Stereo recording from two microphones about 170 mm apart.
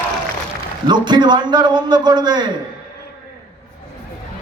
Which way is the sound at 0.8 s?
25° right (ahead or behind).